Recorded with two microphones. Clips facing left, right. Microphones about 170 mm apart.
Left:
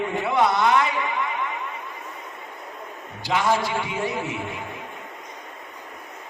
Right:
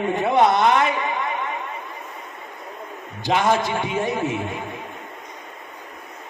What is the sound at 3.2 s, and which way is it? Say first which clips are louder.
Speech: right 3 dB; 20° right (ahead or behind).